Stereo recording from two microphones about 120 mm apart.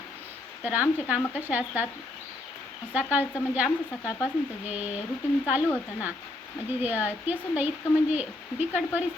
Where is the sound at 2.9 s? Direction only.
15° right (ahead or behind).